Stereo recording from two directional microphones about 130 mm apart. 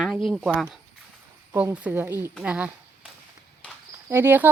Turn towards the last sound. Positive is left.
turn(degrees=-15)  # may be behind; listen again after turning